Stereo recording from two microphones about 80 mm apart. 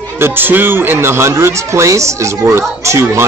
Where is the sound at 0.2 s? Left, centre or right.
Right.